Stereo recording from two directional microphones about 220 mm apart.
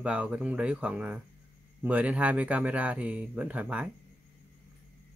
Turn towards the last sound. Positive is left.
turn(degrees=-5)  # may be behind; listen again after turning